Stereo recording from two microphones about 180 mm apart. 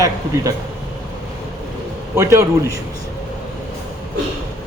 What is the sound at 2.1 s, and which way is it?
Speech, 15° right (ahead or behind).